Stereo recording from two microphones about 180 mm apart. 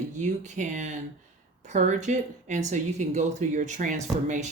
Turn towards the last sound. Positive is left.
turn(degrees=-45)  # may be behind; listen again after turning